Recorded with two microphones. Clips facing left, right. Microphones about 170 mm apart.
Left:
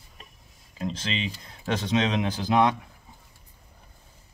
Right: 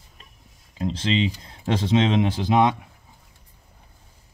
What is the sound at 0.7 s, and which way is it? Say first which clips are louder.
Speech: right 7 dB; 30° right (ahead or behind).